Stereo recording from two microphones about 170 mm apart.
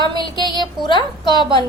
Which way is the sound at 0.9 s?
25° left (ahead or behind).